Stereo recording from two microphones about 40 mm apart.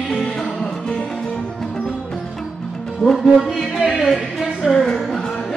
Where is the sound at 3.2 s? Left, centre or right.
Centre.